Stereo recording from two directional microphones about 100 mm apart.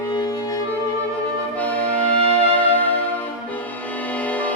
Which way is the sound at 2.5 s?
15° left (ahead or behind).